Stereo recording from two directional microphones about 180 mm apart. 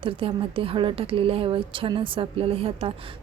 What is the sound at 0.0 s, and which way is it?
A woman's voice, 30° right (ahead or behind).